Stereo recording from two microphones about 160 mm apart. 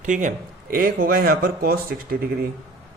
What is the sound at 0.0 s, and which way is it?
Speech, 55° right (ahead or behind).